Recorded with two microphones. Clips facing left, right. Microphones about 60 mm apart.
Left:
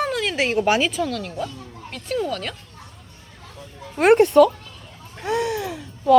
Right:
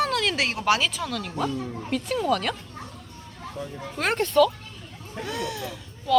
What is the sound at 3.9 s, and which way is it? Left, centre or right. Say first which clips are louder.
Speech: left 8 dB; left.